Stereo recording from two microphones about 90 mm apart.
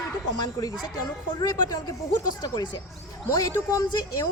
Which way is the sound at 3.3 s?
40° left (ahead or behind).